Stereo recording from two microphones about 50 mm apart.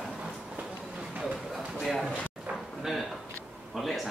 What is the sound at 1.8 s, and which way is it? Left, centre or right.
Speech, centre.